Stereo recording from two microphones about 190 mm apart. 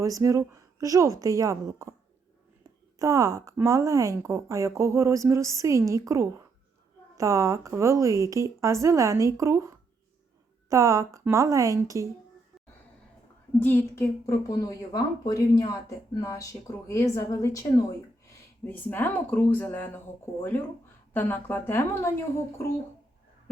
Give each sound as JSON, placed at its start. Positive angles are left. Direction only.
{"t": 0.0, "sound": "a woman's voice", "side_deg": -15}
{"t": 3.0, "sound": "a woman's voice", "side_deg": -15}
{"t": 13.6, "sound": "a woman's voice", "side_deg": 10}
{"t": 21.1, "sound": "a woman's voice", "side_deg": 10}